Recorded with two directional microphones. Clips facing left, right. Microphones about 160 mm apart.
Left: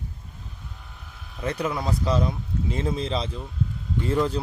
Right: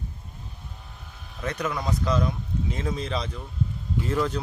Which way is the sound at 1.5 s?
30° left (ahead or behind).